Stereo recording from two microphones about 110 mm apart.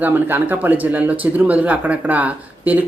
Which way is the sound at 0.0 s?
15° right (ahead or behind).